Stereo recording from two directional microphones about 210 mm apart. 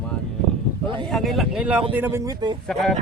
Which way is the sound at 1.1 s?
Centre (ahead or behind).